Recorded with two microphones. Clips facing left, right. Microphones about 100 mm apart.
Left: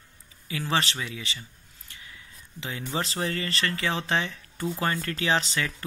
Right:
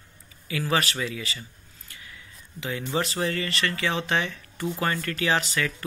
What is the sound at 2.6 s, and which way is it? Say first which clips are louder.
Speech: right 3 dB; 25° left (ahead or behind).